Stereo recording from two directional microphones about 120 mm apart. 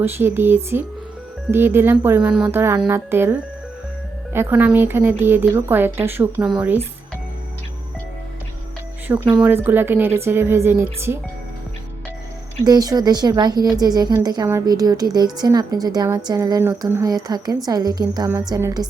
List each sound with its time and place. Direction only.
0.0 s a woman's voice: 20° right (ahead or behind)
9.0 s a woman's voice: 15° right (ahead or behind)
12.6 s a woman's voice: 35° right (ahead or behind)